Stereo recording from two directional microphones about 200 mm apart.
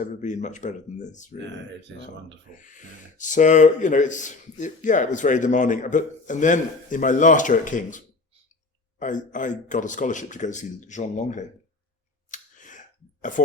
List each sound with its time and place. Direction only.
0.0 s speech: 35° left (ahead or behind)
2.6 s speech: 40° left (ahead or behind)
12.3 s a sound: 40° left (ahead or behind)
13.3 s speech: 40° left (ahead or behind)